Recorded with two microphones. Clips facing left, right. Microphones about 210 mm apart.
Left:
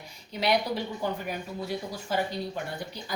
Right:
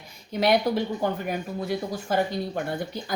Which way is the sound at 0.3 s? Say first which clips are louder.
Right 5 dB; 50° right (ahead or behind).